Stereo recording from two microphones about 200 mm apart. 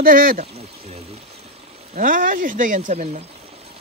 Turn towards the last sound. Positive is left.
turn(degrees=-40)  # may be behind; listen again after turning